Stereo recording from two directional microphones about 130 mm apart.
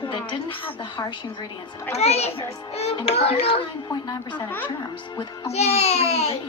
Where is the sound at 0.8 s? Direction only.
35° left (ahead or behind).